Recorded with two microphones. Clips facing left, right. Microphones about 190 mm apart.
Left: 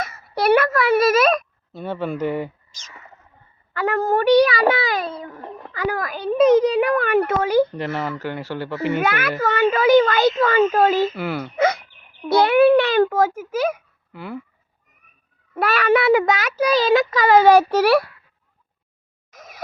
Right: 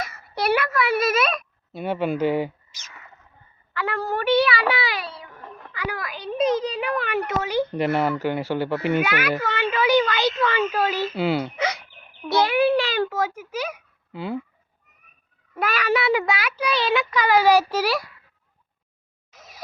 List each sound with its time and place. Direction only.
0.0 s a child's voice: 50° left (ahead or behind)
1.9 s speech: 25° right (ahead or behind)
2.2 s speech: 90° right
3.8 s a child's voice: 45° left (ahead or behind)
7.8 s speech: 15° right (ahead or behind)
9.0 s a child's voice: 50° left (ahead or behind)
11.1 s speech: 10° right (ahead or behind)
11.5 s a child's voice: 55° left (ahead or behind)
14.1 s speech: 20° right (ahead or behind)
15.5 s a child's voice: 55° left (ahead or behind)
19.3 s a sound: 50° left (ahead or behind)